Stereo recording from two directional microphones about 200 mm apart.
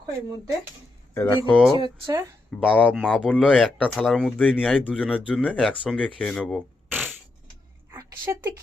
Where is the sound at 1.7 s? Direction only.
25° right (ahead or behind).